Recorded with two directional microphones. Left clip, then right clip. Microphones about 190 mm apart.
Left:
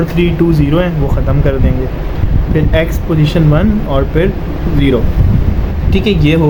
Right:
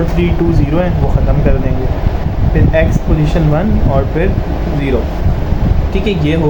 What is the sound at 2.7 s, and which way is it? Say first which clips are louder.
Speech: right 2 dB; 45° left (ahead or behind).